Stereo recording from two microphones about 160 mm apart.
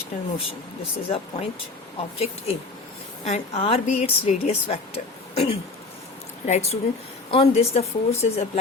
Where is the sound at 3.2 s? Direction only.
40° left (ahead or behind).